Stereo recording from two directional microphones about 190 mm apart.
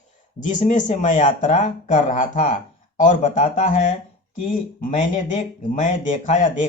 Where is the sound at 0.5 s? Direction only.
40° left (ahead or behind).